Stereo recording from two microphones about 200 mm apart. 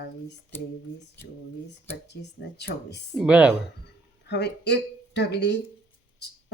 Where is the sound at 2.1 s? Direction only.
55° left (ahead or behind).